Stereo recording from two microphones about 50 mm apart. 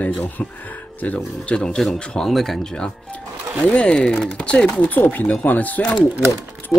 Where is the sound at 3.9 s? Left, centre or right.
Centre.